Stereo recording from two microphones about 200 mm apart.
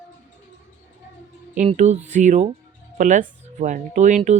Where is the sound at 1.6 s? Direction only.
35° right (ahead or behind).